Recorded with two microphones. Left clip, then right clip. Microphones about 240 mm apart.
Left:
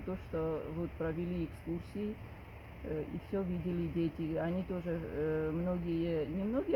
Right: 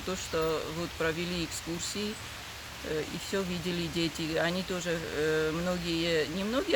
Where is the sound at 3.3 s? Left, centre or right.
Centre.